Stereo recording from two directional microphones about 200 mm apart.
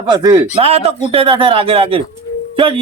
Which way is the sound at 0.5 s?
30° right (ahead or behind).